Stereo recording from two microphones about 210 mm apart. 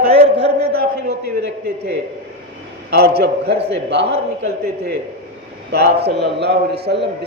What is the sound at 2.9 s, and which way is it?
A man's voice, 50° right (ahead or behind).